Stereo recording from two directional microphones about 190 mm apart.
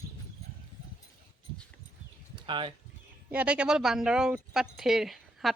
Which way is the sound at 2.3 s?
25° right (ahead or behind).